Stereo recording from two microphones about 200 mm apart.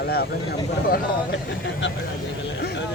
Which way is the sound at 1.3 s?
65° left (ahead or behind).